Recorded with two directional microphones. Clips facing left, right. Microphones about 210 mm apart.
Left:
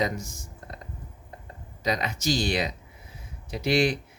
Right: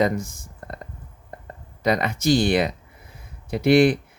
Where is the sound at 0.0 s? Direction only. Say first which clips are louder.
Right 7 dB; 55° right (ahead or behind).